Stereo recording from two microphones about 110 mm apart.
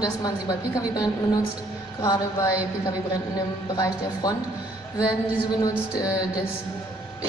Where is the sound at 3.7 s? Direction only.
35° left (ahead or behind).